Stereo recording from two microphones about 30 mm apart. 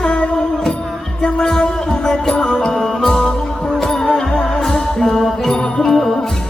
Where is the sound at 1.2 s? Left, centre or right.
Left.